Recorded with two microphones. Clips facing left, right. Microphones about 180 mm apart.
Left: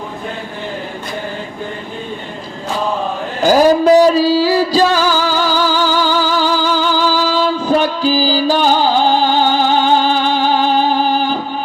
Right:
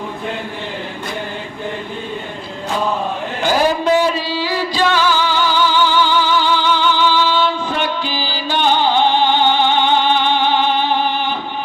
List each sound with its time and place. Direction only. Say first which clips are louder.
3.4 s music: left 6 dB; 40° left (ahead or behind)